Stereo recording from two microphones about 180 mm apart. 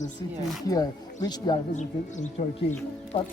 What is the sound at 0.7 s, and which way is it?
Speech, 20° left (ahead or behind).